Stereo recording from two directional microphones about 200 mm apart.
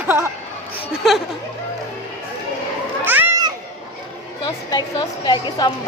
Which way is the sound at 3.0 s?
10° right (ahead or behind).